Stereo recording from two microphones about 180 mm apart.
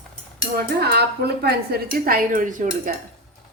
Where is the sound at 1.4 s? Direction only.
60° right (ahead or behind).